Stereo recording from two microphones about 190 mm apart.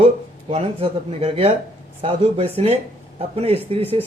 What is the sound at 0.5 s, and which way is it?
Speech, 30° right (ahead or behind).